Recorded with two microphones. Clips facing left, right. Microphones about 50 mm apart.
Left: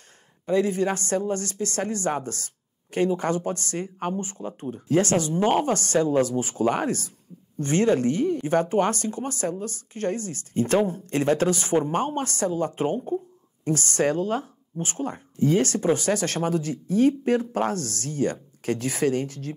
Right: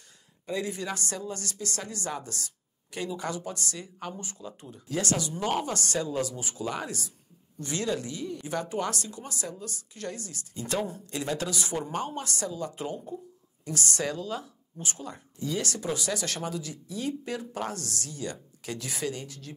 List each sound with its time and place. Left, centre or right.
0.5 s speech: left